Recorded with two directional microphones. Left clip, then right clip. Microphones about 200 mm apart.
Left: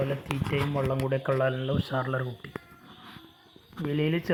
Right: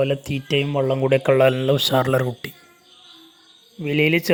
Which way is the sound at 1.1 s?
50° right (ahead or behind).